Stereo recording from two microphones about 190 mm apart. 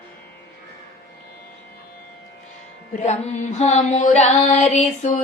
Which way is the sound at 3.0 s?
40° left (ahead or behind).